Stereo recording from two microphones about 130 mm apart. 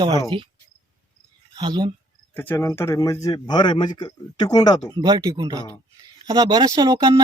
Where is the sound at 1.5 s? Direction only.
35° right (ahead or behind).